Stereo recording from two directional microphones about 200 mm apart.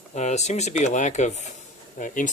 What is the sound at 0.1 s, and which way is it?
Speech, 35° left (ahead or behind).